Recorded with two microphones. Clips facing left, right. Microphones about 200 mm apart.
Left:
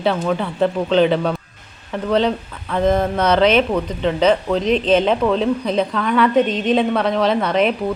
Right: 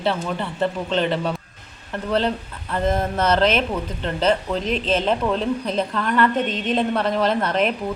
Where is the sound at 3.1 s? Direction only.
5° right (ahead or behind).